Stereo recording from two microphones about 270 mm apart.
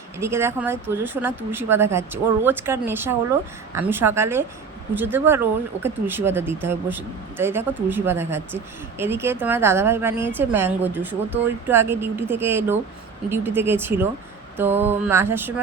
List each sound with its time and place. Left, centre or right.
0.2 s speech: centre